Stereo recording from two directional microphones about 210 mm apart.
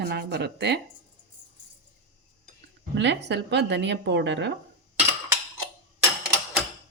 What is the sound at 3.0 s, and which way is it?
Speech, 55° right (ahead or behind).